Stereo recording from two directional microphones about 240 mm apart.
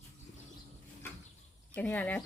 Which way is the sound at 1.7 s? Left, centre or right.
Centre.